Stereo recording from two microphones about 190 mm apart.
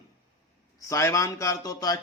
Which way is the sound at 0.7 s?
15° left (ahead or behind).